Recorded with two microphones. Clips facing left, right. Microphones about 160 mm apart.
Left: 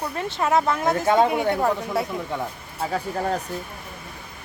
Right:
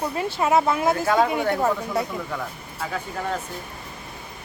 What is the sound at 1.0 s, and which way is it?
Speech, 25° left (ahead or behind).